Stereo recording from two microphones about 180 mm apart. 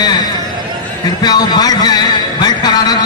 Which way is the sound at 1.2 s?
20° left (ahead or behind).